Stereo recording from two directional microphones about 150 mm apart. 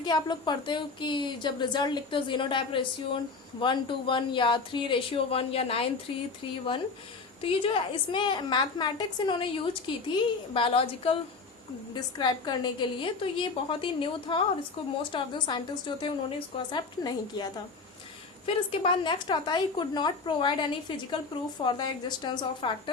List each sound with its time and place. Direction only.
0.0 s a woman's voice: 30° left (ahead or behind)
7.4 s a woman's voice: 35° left (ahead or behind)
11.9 s a woman's voice: 30° left (ahead or behind)